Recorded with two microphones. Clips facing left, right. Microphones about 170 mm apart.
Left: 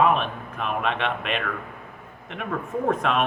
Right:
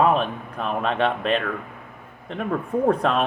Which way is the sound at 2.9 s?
35° right (ahead or behind).